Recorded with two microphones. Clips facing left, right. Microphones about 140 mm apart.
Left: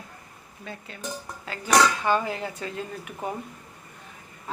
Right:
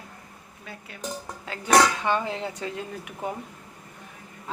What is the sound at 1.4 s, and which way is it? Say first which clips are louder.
Speech: right 1 dB; 20° right (ahead or behind).